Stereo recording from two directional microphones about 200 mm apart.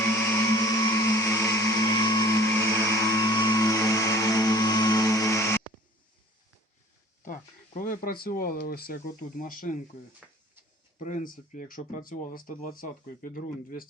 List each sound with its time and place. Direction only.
0.0 s music: 15° left (ahead or behind)
7.3 s speech: 45° left (ahead or behind)
10.2 s a sound: 5° right (ahead or behind)
10.9 s speech: 40° left (ahead or behind)